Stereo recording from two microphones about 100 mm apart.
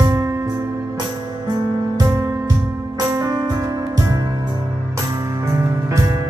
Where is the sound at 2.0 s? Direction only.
35° right (ahead or behind).